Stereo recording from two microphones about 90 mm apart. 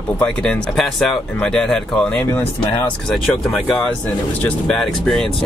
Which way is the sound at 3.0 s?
5° left (ahead or behind).